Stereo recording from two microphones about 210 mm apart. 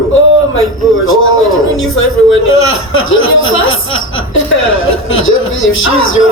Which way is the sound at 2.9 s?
70° left (ahead or behind).